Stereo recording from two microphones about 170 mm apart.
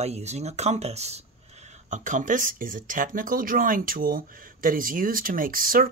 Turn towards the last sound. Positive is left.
turn(degrees=-55)  # may be behind; listen again after turning